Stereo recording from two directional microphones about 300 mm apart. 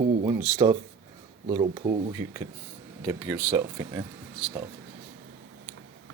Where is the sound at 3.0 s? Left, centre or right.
Centre.